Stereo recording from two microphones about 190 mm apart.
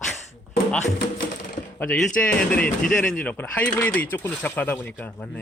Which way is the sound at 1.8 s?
5° left (ahead or behind).